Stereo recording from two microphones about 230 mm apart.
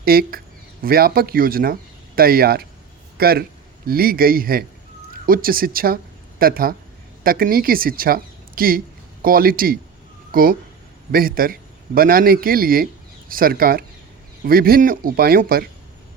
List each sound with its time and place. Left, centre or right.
0.0 s a man's voice: right